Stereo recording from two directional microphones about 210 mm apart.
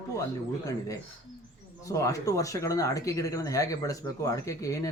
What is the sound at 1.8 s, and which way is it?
Speech, 15° left (ahead or behind).